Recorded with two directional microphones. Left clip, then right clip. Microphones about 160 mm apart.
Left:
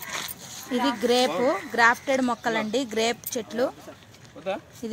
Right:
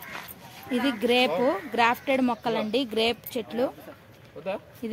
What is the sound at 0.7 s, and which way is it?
Speech, centre (ahead or behind).